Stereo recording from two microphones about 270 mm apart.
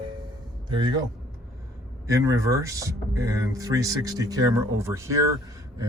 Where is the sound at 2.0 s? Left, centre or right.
Centre.